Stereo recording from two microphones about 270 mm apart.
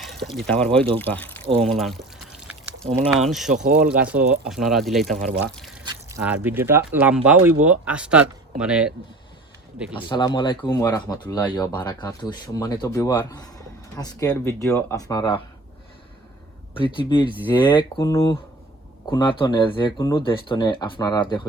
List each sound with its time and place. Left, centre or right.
0.0 s speech: centre
1.5 s pour: centre
3.2 s speech: centre
3.5 s speech: right
3.9 s speech: centre
5.5 s pour: centre
5.8 s speech: centre
9.9 s speech: centre
16.7 s speech: centre